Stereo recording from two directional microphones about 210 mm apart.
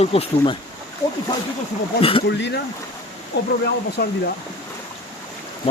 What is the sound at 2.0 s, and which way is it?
Speech, 25° left (ahead or behind).